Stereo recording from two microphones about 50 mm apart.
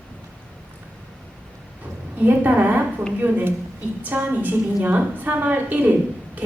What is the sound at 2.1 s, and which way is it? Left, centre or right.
A woman's voice, right.